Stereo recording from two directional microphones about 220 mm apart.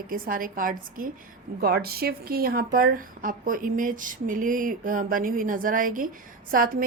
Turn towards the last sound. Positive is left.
turn(degrees=-40)  # may be behind; listen again after turning